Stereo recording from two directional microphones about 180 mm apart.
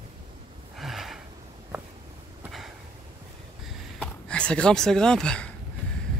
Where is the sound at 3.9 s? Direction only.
5° left (ahead or behind).